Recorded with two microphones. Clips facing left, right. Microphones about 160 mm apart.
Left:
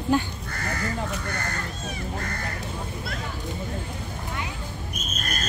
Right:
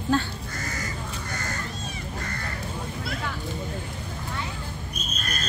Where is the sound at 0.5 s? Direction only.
60° left (ahead or behind).